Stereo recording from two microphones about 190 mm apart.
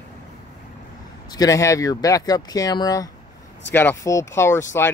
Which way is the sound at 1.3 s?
20° left (ahead or behind).